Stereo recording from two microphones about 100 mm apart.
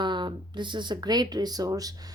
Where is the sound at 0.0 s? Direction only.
50° right (ahead or behind).